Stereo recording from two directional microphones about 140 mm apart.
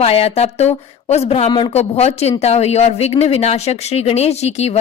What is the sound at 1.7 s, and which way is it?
Speech, 50° left (ahead or behind).